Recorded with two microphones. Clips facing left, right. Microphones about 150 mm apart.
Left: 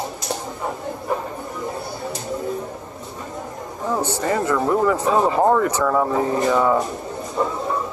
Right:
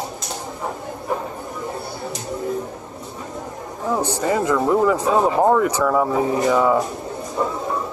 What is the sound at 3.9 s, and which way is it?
Speech, 15° right (ahead or behind).